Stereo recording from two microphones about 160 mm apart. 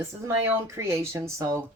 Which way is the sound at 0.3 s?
15° right (ahead or behind).